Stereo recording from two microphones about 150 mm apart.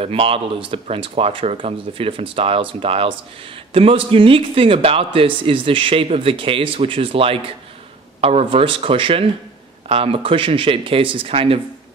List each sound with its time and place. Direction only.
0.0 s speech: 40° right (ahead or behind)